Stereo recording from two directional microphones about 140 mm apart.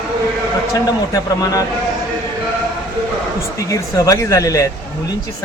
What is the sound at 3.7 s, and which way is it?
Speech, 25° left (ahead or behind).